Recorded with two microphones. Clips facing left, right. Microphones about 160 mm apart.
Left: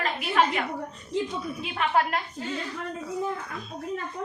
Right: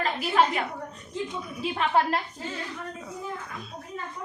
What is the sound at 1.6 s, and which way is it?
Speech, 30° right (ahead or behind).